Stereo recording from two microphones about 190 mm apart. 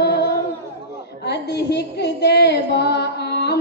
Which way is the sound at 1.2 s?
60° left (ahead or behind).